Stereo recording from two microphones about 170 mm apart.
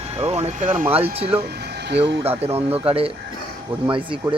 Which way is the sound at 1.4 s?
75° right (ahead or behind).